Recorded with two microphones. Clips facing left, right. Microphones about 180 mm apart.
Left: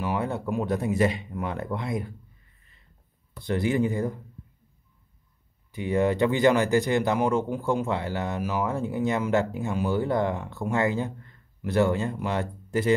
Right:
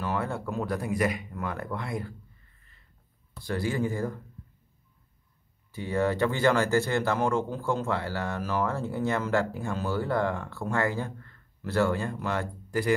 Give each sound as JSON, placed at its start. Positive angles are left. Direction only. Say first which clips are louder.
{"t": 0.0, "sound": "speech", "louder": "left 3 dB", "side_deg": 15}
{"t": 3.4, "sound": "speech", "louder": "left 4 dB", "side_deg": 20}
{"t": 5.7, "sound": "speech", "louder": "left 3 dB", "side_deg": 15}